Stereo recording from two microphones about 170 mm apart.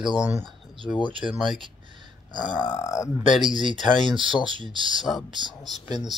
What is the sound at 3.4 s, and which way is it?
Speech, 30° right (ahead or behind).